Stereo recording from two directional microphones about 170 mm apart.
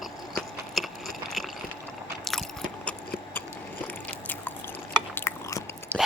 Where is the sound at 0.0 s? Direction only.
Centre (ahead or behind).